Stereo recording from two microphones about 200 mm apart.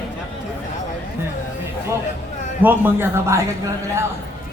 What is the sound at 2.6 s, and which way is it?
Speech, 10° right (ahead or behind).